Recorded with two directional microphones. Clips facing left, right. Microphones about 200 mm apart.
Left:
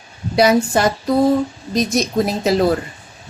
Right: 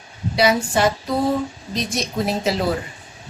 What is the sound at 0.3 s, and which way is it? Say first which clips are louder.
A woman's voice: left 4 dB; 45° left (ahead or behind).